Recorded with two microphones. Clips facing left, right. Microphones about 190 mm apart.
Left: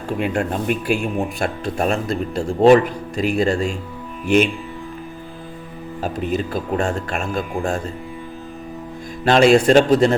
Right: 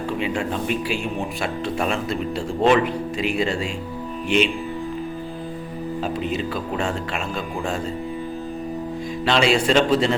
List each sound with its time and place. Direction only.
0.2 s speech: 50° left (ahead or behind)
6.0 s speech: 45° left (ahead or behind)
9.2 s speech: 50° left (ahead or behind)